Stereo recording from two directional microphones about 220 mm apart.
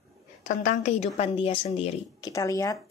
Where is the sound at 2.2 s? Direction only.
15° left (ahead or behind).